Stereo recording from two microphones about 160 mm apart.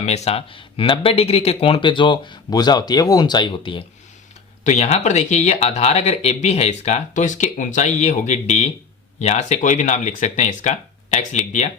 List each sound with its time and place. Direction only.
0.0 s speech: 40° left (ahead or behind)
4.6 s speech: 45° left (ahead or behind)